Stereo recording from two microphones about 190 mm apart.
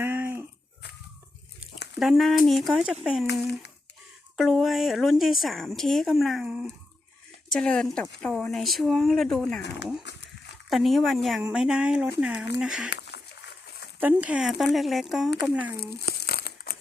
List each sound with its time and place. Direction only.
0.0 s a sound: 10° right (ahead or behind)
2.0 s speech: centre (ahead or behind)
4.4 s speech: centre (ahead or behind)
10.7 s speech: centre (ahead or behind)
12.9 s a sound: 60° left (ahead or behind)
14.0 s speech: 10° right (ahead or behind)
16.0 s crumpling: 60° left (ahead or behind)